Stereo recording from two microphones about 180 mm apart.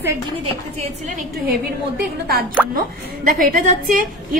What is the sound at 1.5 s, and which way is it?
A woman's voice, 55° right (ahead or behind).